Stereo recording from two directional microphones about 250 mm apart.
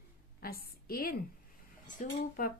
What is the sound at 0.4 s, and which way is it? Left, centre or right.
A woman's voice, left.